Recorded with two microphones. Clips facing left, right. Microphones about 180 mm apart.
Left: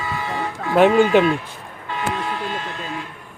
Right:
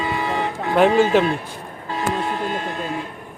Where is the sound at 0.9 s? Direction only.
35° right (ahead or behind).